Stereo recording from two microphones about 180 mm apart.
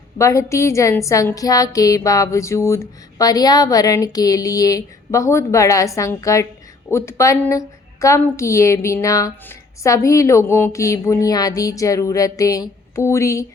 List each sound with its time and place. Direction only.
0.2 s speech: 15° left (ahead or behind)